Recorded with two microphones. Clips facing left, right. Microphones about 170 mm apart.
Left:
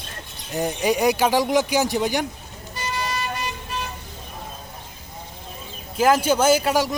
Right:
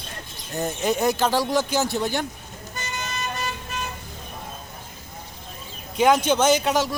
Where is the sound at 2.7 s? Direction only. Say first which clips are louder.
Left 5 dB; 45° right (ahead or behind).